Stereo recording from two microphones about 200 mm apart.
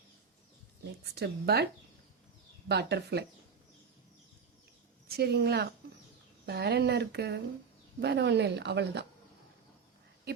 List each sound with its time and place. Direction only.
1.1 s speech: 55° right (ahead or behind)
2.6 s speech: 55° right (ahead or behind)
5.0 s speech: 55° right (ahead or behind)